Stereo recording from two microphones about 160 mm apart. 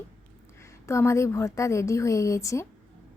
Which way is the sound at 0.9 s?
15° left (ahead or behind).